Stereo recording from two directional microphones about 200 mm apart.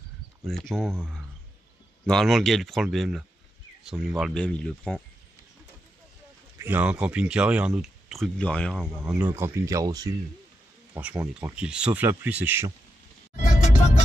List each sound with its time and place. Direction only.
0.5 s speech: centre (ahead or behind)
6.6 s speech: 10° right (ahead or behind)
9.0 s speech: 10° right (ahead or behind)
11.0 s speech: 5° right (ahead or behind)
13.4 s music: 35° left (ahead or behind)